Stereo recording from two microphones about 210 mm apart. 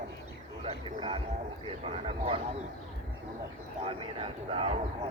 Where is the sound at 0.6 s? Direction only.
25° right (ahead or behind).